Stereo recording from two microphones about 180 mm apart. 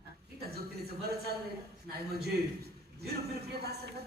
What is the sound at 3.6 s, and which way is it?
Speech, 65° right (ahead or behind).